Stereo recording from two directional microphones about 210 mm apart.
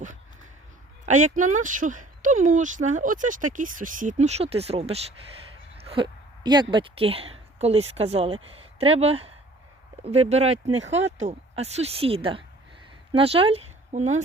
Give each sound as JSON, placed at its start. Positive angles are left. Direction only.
{"t": 1.0, "sound": "a woman's voice", "side_deg": -35}